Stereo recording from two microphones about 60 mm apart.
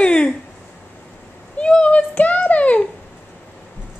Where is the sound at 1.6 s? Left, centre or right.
Centre.